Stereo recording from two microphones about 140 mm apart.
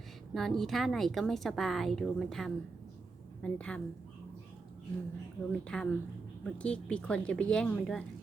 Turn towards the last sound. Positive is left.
turn(degrees=5)  # may be behind; listen again after turning